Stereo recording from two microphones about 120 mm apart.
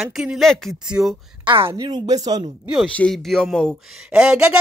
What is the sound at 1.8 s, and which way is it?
Speech, 35° right (ahead or behind).